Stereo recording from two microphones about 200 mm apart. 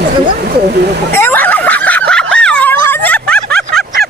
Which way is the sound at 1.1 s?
10° left (ahead or behind).